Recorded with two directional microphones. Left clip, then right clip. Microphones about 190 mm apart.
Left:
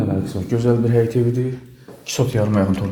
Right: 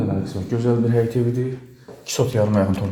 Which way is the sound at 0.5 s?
15° left (ahead or behind).